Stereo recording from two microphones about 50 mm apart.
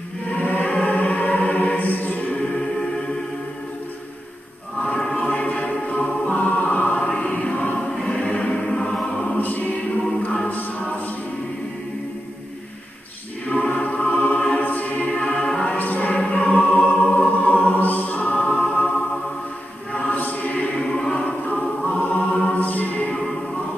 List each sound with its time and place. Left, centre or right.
0.4 s music: left
4.7 s music: left
8.8 s music: centre
9.4 s music: left
13.5 s music: left
15.8 s music: left
19.9 s choir: left
21.2 s music: left